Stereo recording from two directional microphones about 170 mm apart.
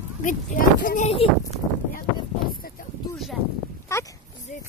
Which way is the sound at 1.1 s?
35° left (ahead or behind).